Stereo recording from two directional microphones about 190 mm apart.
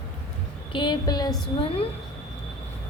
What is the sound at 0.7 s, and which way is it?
Speech, 25° left (ahead or behind).